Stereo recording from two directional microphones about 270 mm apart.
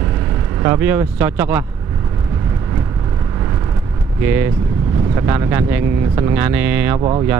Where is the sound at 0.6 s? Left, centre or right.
Centre.